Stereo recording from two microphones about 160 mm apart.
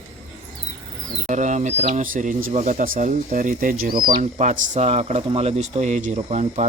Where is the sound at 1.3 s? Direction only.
50° right (ahead or behind).